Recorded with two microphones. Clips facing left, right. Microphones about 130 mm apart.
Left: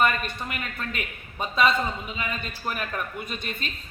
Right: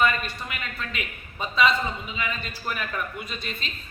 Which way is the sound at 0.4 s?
45° left (ahead or behind).